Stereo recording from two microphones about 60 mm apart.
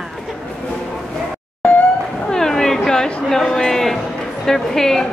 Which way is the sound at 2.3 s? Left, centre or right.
Centre.